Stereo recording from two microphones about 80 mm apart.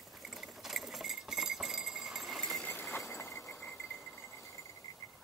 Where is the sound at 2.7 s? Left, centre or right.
Left.